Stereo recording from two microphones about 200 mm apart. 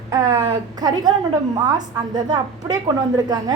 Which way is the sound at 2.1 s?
20° right (ahead or behind).